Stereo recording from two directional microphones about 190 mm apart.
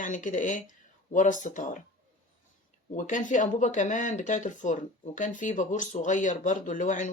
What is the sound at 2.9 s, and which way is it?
Speech, 40° left (ahead or behind).